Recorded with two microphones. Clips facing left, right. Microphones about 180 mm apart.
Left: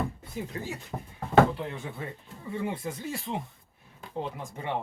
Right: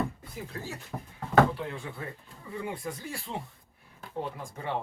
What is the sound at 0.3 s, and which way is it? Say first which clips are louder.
Speech: left 5 dB; 20° left (ahead or behind).